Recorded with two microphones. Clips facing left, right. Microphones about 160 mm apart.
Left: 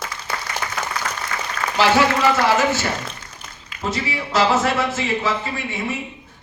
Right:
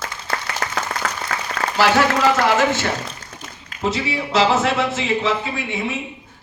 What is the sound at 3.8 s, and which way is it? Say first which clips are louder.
A man's voice: right 3 dB; centre (ahead or behind).